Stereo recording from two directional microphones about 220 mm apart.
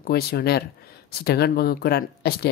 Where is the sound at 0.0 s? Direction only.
45° left (ahead or behind).